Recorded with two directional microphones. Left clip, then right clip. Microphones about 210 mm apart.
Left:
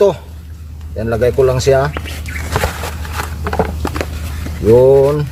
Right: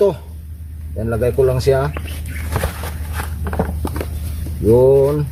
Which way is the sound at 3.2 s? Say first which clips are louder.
Left 6 dB; 20° left (ahead or behind).